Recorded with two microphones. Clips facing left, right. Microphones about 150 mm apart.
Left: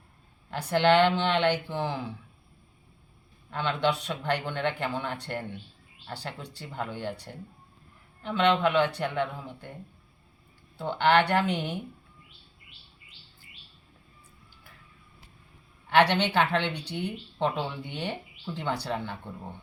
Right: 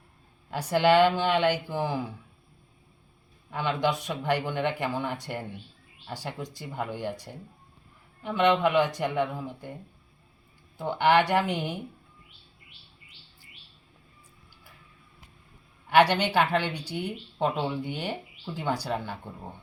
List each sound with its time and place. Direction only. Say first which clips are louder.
0.5 s speech: right 1 dB; 10° right (ahead or behind)
3.5 s speech: even; 10° right (ahead or behind)
10.8 s speech: right 1 dB; 10° right (ahead or behind)
15.9 s speech: right 1 dB; 10° right (ahead or behind)